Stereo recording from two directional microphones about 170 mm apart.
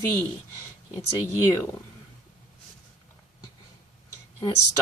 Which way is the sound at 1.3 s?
15° left (ahead or behind).